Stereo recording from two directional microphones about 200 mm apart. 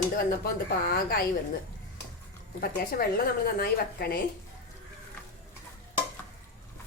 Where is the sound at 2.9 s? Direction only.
50° left (ahead or behind).